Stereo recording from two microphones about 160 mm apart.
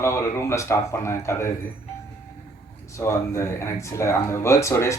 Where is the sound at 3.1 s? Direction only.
15° left (ahead or behind).